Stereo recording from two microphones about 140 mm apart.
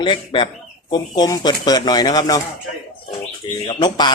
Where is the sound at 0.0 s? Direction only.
35° left (ahead or behind).